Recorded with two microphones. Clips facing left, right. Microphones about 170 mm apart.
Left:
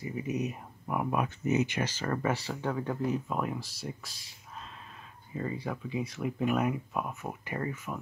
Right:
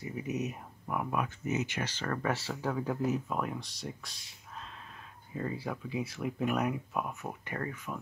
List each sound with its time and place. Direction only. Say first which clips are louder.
0.0 s speech: left 2 dB; centre (ahead or behind)
0.9 s speech: left 3 dB; 20° left (ahead or behind)
2.2 s speech: even; centre (ahead or behind)
5.3 s speech: left 1 dB; centre (ahead or behind)